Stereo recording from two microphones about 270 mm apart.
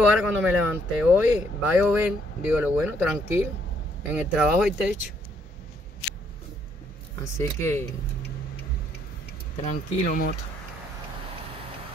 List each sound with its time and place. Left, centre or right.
0.0 s speech: centre
7.3 s speech: centre
9.7 s speech: left